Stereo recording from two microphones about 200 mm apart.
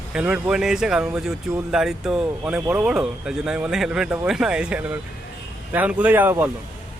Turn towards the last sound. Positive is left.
turn(degrees=-10)  # may be behind; listen again after turning